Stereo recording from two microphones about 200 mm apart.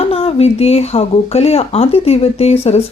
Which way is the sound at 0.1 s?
30° left (ahead or behind).